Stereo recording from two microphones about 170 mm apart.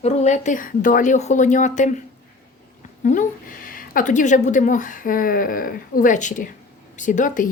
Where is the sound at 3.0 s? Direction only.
50° left (ahead or behind).